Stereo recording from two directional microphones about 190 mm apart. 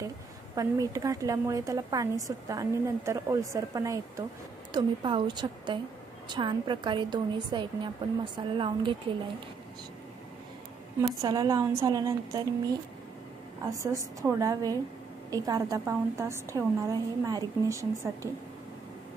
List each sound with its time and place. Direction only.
0.6 s a woman's voice: 15° right (ahead or behind)
11.0 s a woman's voice: 20° right (ahead or behind)
13.6 s a woman's voice: 15° right (ahead or behind)